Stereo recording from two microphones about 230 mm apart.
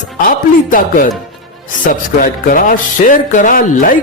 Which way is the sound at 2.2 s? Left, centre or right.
Left.